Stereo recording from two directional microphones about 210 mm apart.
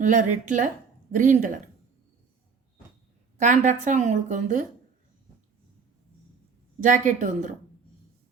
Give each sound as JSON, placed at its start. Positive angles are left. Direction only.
{"t": 0.0, "sound": "a woman's voice", "side_deg": -35}
{"t": 3.3, "sound": "a woman's voice", "side_deg": -35}
{"t": 6.7, "sound": "a woman's voice", "side_deg": -35}